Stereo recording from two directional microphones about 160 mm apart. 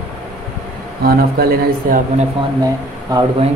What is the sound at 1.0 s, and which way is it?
Speech, 70° right (ahead or behind).